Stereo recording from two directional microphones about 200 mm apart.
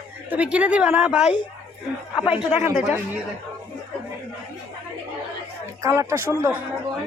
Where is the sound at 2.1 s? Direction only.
25° left (ahead or behind).